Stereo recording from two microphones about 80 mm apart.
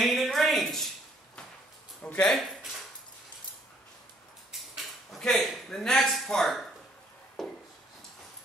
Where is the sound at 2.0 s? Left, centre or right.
Centre.